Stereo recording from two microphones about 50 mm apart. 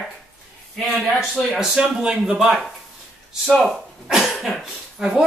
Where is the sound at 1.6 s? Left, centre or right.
Centre.